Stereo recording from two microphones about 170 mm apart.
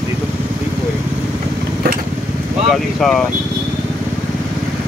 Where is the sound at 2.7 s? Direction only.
5° left (ahead or behind).